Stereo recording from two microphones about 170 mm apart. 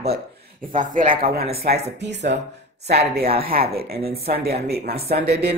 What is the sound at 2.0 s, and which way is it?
Speech, 85° right.